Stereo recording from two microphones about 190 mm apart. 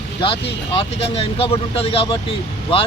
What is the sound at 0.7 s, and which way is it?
Speech, 30° left (ahead or behind).